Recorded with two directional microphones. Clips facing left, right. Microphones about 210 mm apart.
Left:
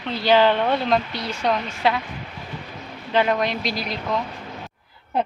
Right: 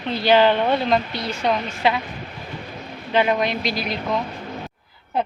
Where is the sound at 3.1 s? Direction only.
10° right (ahead or behind).